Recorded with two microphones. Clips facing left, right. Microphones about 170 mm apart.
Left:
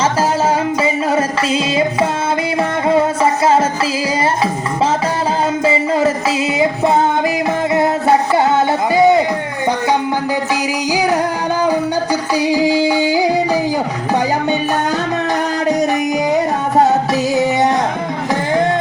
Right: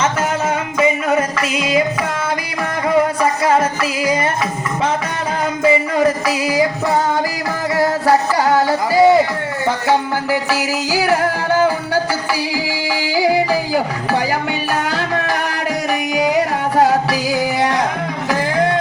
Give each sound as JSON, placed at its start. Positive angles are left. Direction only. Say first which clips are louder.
{"t": 0.0, "sound": "music", "louder": "left 3 dB", "side_deg": 30}
{"t": 5.6, "sound": "music", "louder": "right 2 dB", "side_deg": 25}
{"t": 10.5, "sound": "music", "louder": "left 1 dB", "side_deg": 20}
{"t": 12.3, "sound": "music", "louder": "left 7 dB", "side_deg": 20}
{"t": 17.1, "sound": "music", "louder": "left 3 dB", "side_deg": 25}